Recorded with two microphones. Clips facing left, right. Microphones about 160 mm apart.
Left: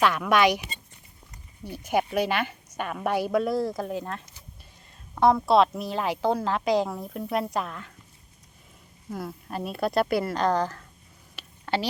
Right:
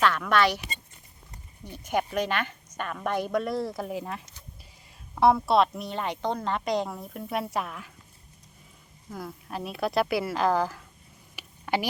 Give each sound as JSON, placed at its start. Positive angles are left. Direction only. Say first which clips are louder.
{"t": 0.0, "sound": "a woman's voice", "louder": "left 2 dB", "side_deg": 10}
{"t": 1.6, "sound": "a woman's voice", "louder": "left 3 dB", "side_deg": 10}
{"t": 5.2, "sound": "a woman's voice", "louder": "left 1 dB", "side_deg": 0}
{"t": 9.1, "sound": "a woman's voice", "louder": "left 2 dB", "side_deg": 0}
{"t": 11.3, "sound": "a sound", "louder": "even", "side_deg": -15}